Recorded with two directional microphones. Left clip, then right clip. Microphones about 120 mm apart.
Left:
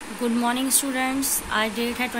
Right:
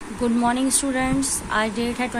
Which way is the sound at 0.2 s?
40° right (ahead or behind).